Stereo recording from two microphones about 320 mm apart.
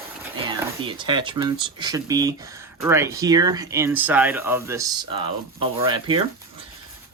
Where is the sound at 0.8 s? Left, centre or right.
Centre.